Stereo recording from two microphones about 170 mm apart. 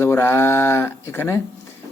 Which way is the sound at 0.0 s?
15° left (ahead or behind).